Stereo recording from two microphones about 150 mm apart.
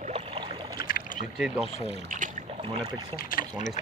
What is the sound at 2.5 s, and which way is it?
Speech, 35° right (ahead or behind).